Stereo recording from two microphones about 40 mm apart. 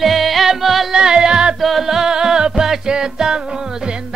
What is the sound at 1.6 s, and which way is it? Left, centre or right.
Music, centre.